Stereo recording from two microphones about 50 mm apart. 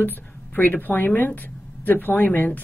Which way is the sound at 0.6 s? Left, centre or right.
Left.